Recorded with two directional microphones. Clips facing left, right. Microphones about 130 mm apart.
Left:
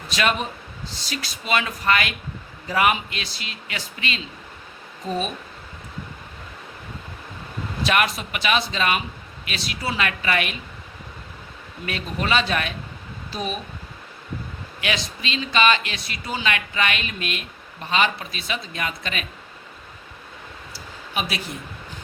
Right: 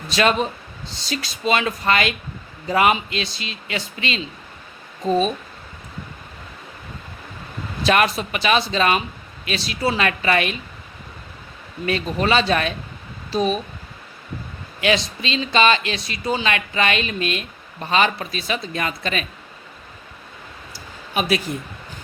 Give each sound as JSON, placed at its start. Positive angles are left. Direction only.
{"t": 0.1, "sound": "speech", "side_deg": -30}
{"t": 7.9, "sound": "speech", "side_deg": -35}
{"t": 11.9, "sound": "speech", "side_deg": -35}
{"t": 14.8, "sound": "speech", "side_deg": -30}
{"t": 20.7, "sound": "a sound", "side_deg": -50}